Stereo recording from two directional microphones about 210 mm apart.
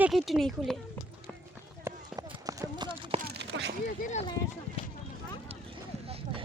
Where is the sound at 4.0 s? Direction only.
35° left (ahead or behind).